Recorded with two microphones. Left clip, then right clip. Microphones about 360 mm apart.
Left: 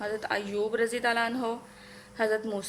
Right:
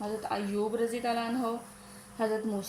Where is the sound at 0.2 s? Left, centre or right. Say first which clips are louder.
Left 2 dB; left.